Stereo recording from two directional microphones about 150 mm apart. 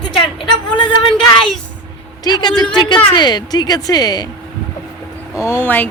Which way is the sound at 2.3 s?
25° left (ahead or behind).